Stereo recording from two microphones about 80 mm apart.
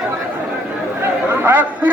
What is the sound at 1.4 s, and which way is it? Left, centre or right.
Chatter, right.